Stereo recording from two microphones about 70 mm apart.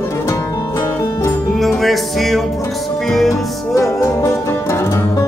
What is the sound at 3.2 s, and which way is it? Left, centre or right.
Music, left.